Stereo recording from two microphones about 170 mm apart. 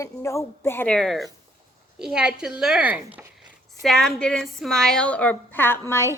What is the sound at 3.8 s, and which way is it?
A woman's voice, centre (ahead or behind).